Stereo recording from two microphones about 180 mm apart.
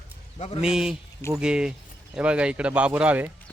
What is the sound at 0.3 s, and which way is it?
Speech, 35° left (ahead or behind).